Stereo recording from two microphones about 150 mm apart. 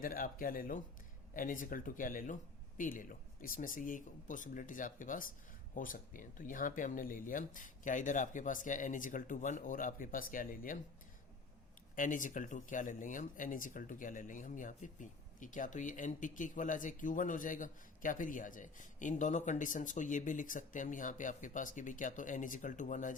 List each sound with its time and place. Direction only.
0.0 s speech: 70° left (ahead or behind)
11.9 s speech: 60° left (ahead or behind)